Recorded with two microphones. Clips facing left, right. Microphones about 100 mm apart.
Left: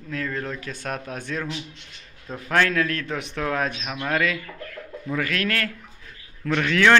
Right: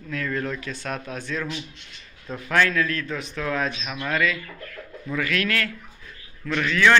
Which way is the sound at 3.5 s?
50° left (ahead or behind).